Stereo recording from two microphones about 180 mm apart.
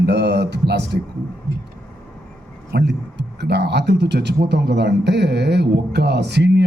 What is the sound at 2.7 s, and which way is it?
Speech, 70° right (ahead or behind).